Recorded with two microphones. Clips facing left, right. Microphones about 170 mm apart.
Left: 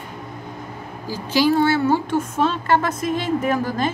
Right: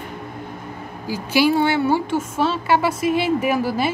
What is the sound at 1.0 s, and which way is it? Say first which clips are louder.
A woman's voice: right 1 dB; 10° right (ahead or behind).